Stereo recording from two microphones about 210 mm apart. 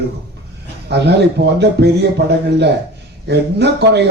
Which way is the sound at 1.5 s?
50° right (ahead or behind).